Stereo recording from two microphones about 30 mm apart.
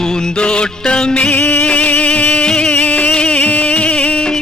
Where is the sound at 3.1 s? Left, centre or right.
Left.